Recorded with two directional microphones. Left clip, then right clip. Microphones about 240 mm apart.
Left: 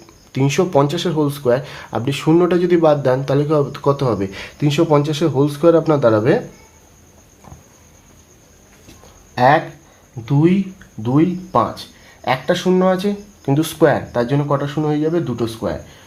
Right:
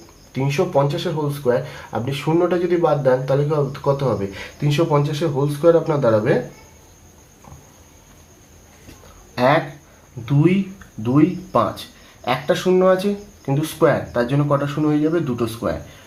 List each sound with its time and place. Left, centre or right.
0.3 s speech: left
9.3 s a sound: left
11.0 s speech: left